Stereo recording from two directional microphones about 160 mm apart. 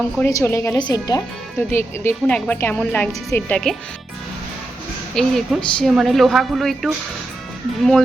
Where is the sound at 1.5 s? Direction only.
15° left (ahead or behind).